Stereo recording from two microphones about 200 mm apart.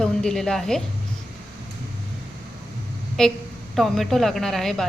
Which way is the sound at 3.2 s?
Centre (ahead or behind).